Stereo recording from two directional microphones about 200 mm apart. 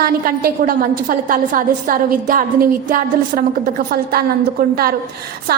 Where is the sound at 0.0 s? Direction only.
50° right (ahead or behind).